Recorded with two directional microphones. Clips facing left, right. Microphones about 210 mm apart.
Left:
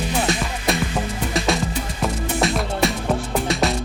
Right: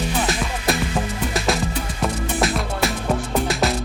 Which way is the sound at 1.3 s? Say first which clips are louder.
Left 1 dB; centre (ahead or behind).